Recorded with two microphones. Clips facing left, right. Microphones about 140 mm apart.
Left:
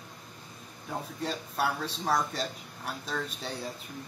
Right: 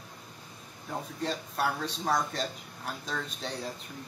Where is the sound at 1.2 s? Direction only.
Centre (ahead or behind).